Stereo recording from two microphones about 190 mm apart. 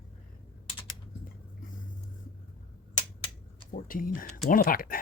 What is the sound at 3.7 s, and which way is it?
Speech, 45° left (ahead or behind).